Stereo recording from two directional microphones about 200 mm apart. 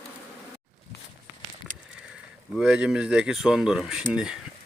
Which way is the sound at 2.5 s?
5° right (ahead or behind).